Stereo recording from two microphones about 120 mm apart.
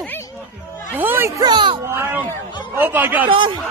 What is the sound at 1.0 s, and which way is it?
Speech, 15° right (ahead or behind).